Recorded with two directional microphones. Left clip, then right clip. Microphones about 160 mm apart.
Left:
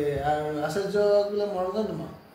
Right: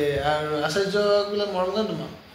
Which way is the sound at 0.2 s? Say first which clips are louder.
Right 3 dB; 5° right (ahead or behind).